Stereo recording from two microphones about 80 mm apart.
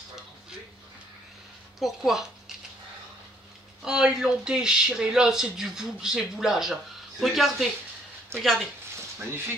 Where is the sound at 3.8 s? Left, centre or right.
Centre.